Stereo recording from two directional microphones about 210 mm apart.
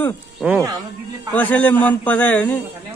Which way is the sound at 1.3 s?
10° left (ahead or behind).